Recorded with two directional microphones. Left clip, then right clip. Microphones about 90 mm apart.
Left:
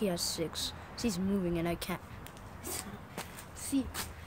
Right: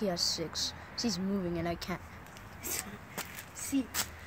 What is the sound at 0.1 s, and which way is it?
Speech, 90° left.